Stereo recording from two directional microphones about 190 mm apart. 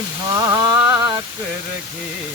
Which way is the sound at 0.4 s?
15° right (ahead or behind).